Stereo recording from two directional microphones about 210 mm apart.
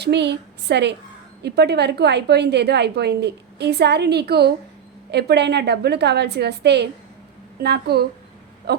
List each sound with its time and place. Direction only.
0.0 s a woman's voice: 55° right (ahead or behind)
8.7 s wheeze: 50° right (ahead or behind)